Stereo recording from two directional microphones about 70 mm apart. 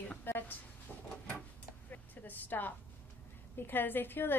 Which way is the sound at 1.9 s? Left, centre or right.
Left.